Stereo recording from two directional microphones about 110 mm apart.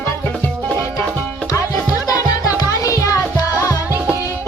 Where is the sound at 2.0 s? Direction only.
30° left (ahead or behind).